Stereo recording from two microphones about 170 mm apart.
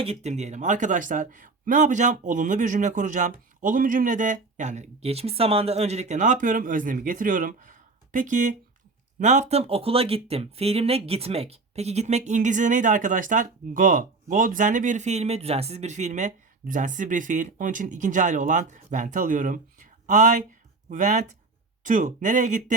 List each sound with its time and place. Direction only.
0.0 s speech: 40° right (ahead or behind)